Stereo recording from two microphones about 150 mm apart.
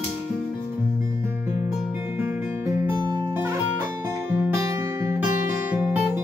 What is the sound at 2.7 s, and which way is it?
Music, 25° right (ahead or behind).